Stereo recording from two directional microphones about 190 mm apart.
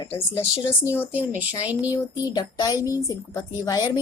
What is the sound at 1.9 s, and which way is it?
A woman's voice, 20° left (ahead or behind).